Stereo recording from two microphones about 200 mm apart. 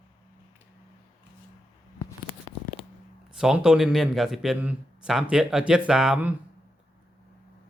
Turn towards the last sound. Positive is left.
turn(degrees=-5)  # may be behind; listen again after turning